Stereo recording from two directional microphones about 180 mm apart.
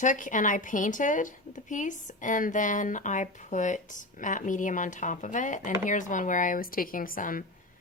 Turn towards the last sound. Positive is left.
turn(degrees=50)  # may be behind; listen again after turning